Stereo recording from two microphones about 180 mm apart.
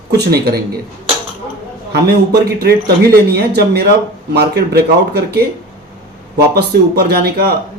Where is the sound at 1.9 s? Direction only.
60° right (ahead or behind).